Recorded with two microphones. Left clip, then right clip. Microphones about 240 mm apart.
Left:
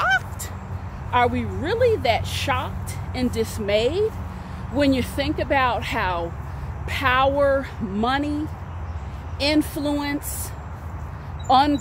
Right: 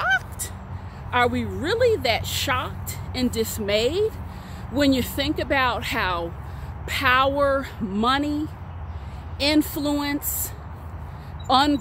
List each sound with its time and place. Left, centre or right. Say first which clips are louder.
1.1 s speech: left 1 dB; right
11.4 s speech: left 2 dB; right